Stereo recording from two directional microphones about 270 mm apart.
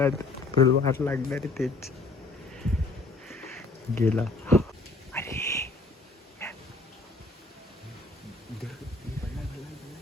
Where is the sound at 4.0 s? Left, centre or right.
Centre.